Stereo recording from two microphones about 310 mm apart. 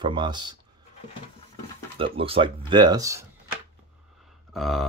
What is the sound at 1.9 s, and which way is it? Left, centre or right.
Speech, centre.